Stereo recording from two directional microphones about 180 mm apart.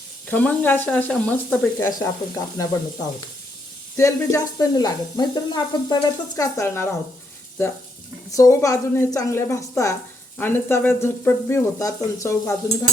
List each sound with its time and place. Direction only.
0.3 s speech: 10° left (ahead or behind)
1.9 s speech: 20° left (ahead or behind)
3.9 s speech: 15° left (ahead or behind)
8.4 s speech: 15° left (ahead or behind)